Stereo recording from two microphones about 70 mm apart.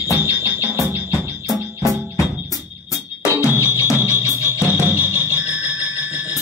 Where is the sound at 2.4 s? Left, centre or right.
Left.